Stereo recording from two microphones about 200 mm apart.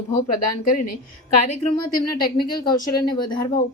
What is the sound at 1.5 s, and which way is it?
A woman's voice, 30° left (ahead or behind).